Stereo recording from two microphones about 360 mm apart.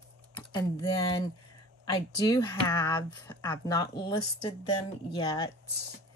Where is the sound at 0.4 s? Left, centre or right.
Centre.